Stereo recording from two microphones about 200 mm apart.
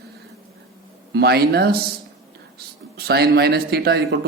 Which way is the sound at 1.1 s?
55° right (ahead or behind).